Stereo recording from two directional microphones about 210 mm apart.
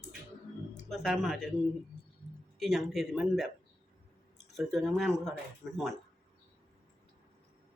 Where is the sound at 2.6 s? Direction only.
Centre (ahead or behind).